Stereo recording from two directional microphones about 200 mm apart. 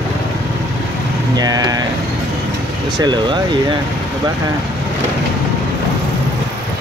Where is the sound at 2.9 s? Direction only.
20° right (ahead or behind).